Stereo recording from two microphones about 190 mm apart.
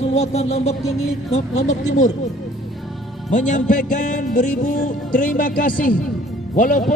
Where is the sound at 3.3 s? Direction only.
40° left (ahead or behind).